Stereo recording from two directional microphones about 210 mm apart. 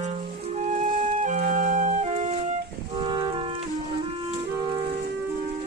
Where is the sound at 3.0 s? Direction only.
20° right (ahead or behind).